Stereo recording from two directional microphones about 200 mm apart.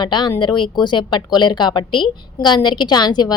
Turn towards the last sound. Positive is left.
turn(degrees=20)  # may be behind; listen again after turning